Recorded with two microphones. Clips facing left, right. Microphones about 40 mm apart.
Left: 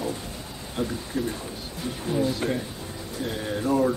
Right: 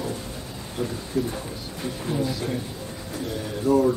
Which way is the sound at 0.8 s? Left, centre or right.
Left.